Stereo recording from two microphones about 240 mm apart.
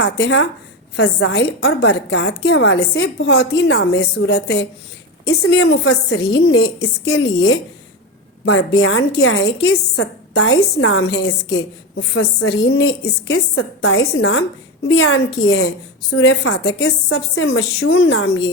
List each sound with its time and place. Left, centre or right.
0.0 s a woman's voice: left
5.4 s a woman's voice: left